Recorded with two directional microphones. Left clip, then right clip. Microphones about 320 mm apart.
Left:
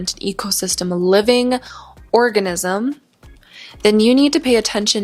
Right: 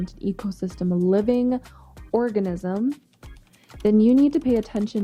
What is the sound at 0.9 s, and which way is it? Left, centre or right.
Speech, centre.